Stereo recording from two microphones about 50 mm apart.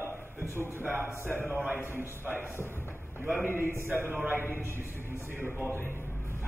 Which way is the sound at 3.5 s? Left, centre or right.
Right.